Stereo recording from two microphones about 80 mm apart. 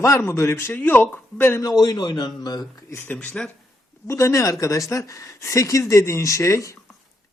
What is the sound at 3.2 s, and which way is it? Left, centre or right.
Speech, centre.